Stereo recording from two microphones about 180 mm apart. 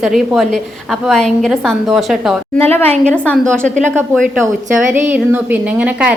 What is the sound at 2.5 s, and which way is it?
Speech, 10° left (ahead or behind).